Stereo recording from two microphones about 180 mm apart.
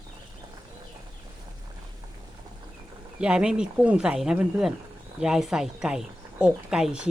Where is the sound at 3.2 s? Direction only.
5° right (ahead or behind).